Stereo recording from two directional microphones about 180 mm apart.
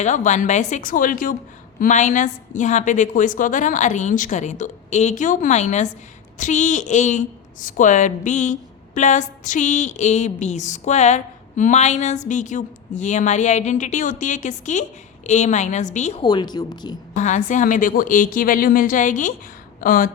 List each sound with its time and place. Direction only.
0.0 s a woman's voice: 40° left (ahead or behind)
16.2 s speech: 25° left (ahead or behind)
17.2 s a woman's voice: 45° left (ahead or behind)